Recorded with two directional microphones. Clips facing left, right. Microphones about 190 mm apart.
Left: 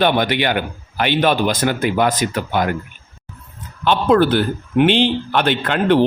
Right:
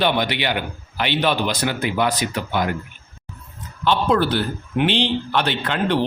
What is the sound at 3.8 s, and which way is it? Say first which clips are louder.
Speech: left 4 dB; 55° left (ahead or behind).